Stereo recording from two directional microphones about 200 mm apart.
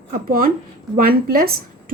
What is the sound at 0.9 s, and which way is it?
Speech, 45° right (ahead or behind).